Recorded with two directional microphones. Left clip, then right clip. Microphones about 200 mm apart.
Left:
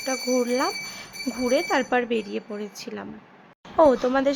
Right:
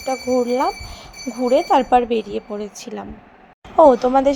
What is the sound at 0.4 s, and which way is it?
A woman's voice, 5° right (ahead or behind).